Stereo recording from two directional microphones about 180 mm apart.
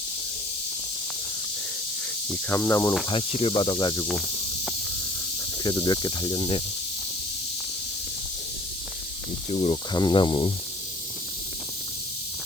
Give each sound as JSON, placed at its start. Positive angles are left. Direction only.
{"t": 2.3, "sound": "speech", "side_deg": 15}
{"t": 3.1, "sound": "snake", "side_deg": 30}
{"t": 5.6, "sound": "snake", "side_deg": 25}
{"t": 9.5, "sound": "speech", "side_deg": 35}
{"t": 9.9, "sound": "snake", "side_deg": 25}